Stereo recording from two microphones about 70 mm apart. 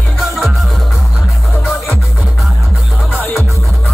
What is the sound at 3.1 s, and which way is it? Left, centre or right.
Music, left.